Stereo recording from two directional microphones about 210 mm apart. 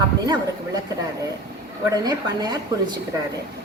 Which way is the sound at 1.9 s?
20° right (ahead or behind).